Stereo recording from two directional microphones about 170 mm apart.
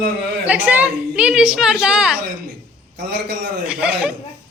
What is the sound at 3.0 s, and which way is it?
Speech, 75° right (ahead or behind).